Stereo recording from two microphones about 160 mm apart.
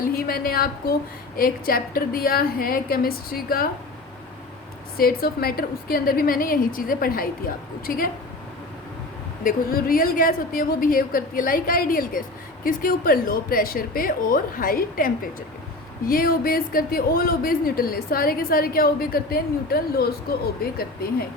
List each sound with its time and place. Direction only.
0.1 s a woman's voice: 65° left (ahead or behind)
4.9 s a woman's voice: 70° left (ahead or behind)
9.4 s a woman's voice: 60° left (ahead or behind)